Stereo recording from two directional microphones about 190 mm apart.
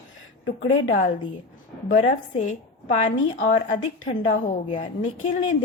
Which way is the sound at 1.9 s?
40° left (ahead or behind).